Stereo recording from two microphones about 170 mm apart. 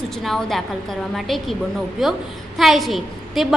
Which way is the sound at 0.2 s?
Centre (ahead or behind).